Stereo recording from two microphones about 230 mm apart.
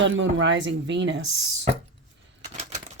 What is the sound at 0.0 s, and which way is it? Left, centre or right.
Speech, right.